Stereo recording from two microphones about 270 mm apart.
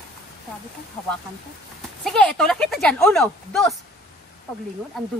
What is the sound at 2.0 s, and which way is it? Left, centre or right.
Speech, centre.